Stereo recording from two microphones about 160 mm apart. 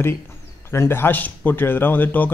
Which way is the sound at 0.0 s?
15° left (ahead or behind).